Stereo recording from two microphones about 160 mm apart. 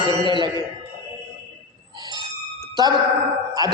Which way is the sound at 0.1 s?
30° right (ahead or behind).